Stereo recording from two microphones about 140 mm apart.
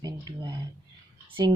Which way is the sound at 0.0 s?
30° right (ahead or behind).